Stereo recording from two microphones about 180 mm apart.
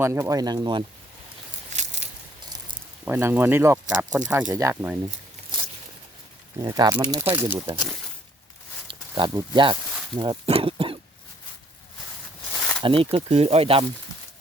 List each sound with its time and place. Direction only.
0.0 s speech: 15° right (ahead or behind)
1.7 s a sound: 40° right (ahead or behind)
3.0 s speech: 15° right (ahead or behind)
4.5 s speech: 15° right (ahead or behind)
6.6 s speech: 20° right (ahead or behind)
8.9 s speech: 25° right (ahead or behind)
10.2 s cough: 30° right (ahead or behind)
13.0 s speech: 30° right (ahead or behind)